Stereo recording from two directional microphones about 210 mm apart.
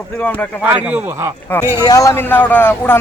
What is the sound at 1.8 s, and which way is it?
Speech, 15° left (ahead or behind).